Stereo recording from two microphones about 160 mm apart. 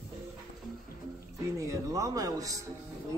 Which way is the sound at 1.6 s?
20° right (ahead or behind).